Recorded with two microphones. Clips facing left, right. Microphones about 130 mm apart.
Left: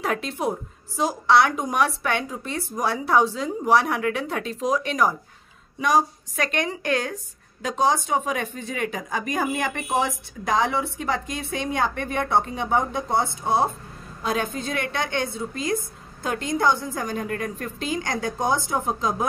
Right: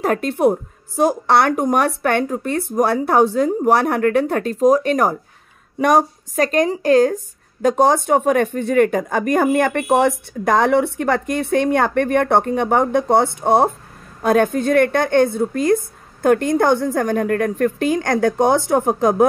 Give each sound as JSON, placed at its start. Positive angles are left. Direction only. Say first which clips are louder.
{"t": 0.0, "sound": "a woman's voice", "louder": "right 9 dB", "side_deg": -50}
{"t": 6.3, "sound": "a woman's voice", "louder": "right 9 dB", "side_deg": -40}
{"t": 7.6, "sound": "speech", "louder": "right 8 dB", "side_deg": -50}